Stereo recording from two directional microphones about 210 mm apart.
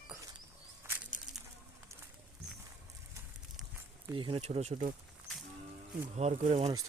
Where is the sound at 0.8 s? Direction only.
10° right (ahead or behind).